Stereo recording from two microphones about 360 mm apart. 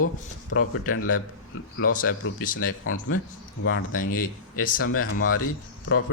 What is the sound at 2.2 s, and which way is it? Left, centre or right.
Speech, left.